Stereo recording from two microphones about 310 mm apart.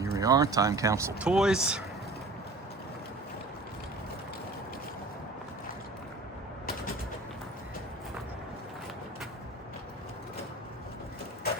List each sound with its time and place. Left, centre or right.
0.0 s speech: centre